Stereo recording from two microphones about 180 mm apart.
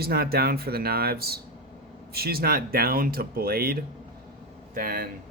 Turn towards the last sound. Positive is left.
turn(degrees=-50)  # may be behind; listen again after turning